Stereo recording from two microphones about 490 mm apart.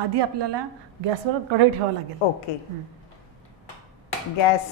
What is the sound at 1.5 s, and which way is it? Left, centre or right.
Speech, right.